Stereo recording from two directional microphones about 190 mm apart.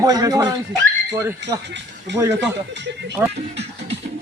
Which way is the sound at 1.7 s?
65° right (ahead or behind).